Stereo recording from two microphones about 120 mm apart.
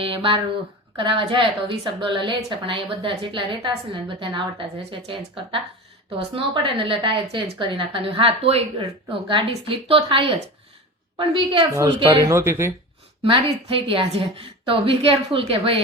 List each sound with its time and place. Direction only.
0.0 s a woman's voice: 50° right (ahead or behind)
12.2 s speech: 20° right (ahead or behind)
13.2 s a woman's voice: 50° right (ahead or behind)